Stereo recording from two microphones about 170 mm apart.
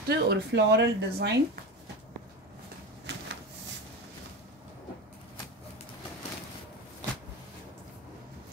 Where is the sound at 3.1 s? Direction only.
90° right.